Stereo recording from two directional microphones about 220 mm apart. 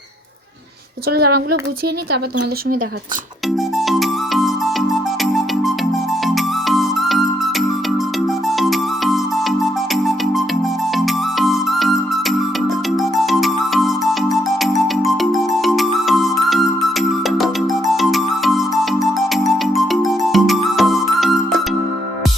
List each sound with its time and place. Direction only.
1.1 s speech: 45° right (ahead or behind)
3.8 s music: centre (ahead or behind)
8.4 s music: centre (ahead or behind)